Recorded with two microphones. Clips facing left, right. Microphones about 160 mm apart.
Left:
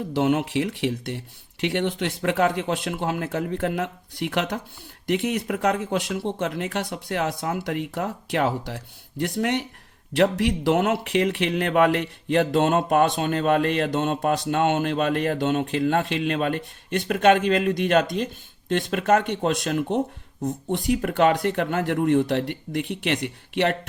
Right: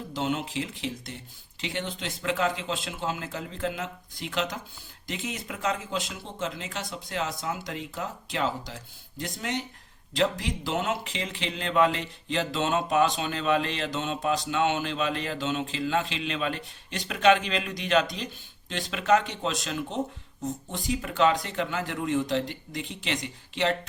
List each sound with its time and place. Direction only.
0.1 s speech: 60° left (ahead or behind)